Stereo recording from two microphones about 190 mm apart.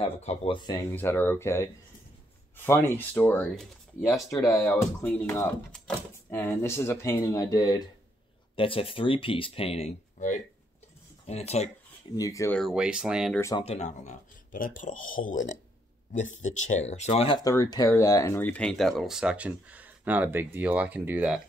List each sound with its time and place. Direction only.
0.2 s speech: 35° left (ahead or behind)
0.9 s speech: 10° left (ahead or behind); by 11.7 s 35° left (ahead or behind)
12.2 s speech: 15° left (ahead or behind)
12.5 s speech: centre (ahead or behind)
13.3 s speech: 15° left (ahead or behind)
13.7 s speech: 40° left (ahead or behind)
17.4 s speech: 20° left (ahead or behind); by 21.4 s 10° right (ahead or behind)